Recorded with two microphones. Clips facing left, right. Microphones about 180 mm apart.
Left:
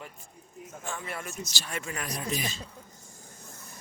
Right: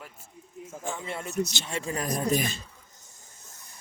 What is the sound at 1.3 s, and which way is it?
Speech, 65° right (ahead or behind).